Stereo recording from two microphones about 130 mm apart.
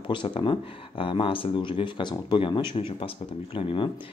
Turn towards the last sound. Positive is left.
turn(degrees=45)  # may be behind; listen again after turning